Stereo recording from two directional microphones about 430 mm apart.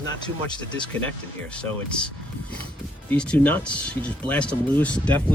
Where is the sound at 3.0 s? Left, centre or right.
Centre.